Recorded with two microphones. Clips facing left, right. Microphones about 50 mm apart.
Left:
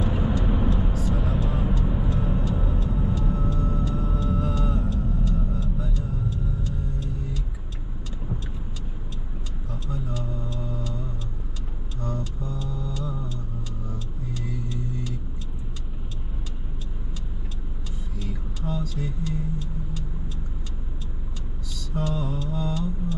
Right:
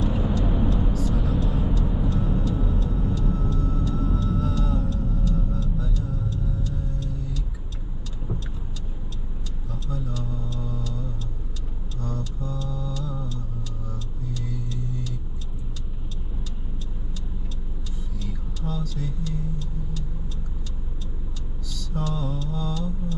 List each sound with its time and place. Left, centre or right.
0.0 s vehicle: centre
9.8 s a sound: centre
12.2 s a sound: centre
12.9 s music: centre
14.3 s vehicle: centre
18.2 s music: centre
21.9 s mantra: centre